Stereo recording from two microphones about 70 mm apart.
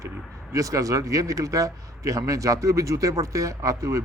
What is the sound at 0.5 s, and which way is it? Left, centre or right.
A man's voice, right.